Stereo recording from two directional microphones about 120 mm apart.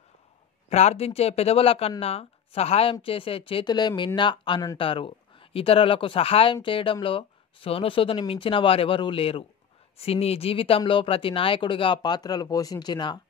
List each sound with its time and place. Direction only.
0.7 s speech: 60° left (ahead or behind)
3.6 s speech: 35° left (ahead or behind)